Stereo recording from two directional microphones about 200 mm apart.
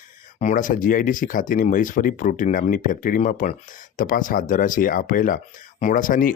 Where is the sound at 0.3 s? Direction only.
40° left (ahead or behind).